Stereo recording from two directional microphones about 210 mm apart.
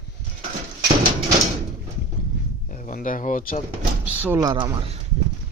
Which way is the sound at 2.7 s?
40° left (ahead or behind).